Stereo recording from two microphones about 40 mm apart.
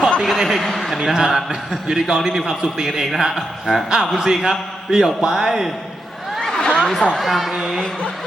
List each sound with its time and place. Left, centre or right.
0.3 s a man's voice: centre
1.0 s a man's voice: centre
6.4 s a sound: centre
6.7 s chatter: centre
7.2 s a man's voice: centre
7.5 s a sound: centre